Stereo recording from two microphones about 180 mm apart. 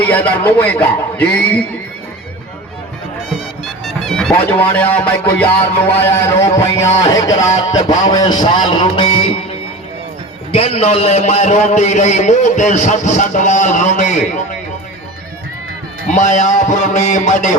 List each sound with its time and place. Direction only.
0.0 s a man's voice: 10° left (ahead or behind)
3.8 s a man's voice: centre (ahead or behind)
7.0 s music: 20° left (ahead or behind)
10.5 s a man's voice: 35° left (ahead or behind)
16.0 s a man's voice: 45° left (ahead or behind)